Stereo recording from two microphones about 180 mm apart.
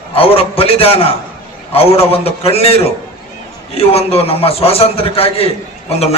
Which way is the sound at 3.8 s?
35° left (ahead or behind).